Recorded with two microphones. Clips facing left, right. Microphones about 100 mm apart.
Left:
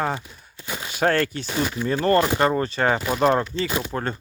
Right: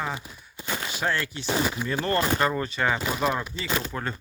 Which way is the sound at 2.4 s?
35° left (ahead or behind).